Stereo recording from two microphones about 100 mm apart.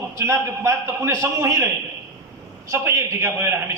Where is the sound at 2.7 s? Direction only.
30° right (ahead or behind).